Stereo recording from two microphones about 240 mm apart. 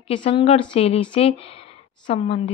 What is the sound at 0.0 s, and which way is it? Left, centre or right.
Speech, left.